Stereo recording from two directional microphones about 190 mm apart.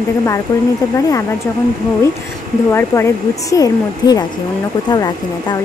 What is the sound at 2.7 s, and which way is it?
A woman's voice, 15° left (ahead or behind).